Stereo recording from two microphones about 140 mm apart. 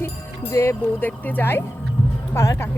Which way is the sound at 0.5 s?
20° left (ahead or behind).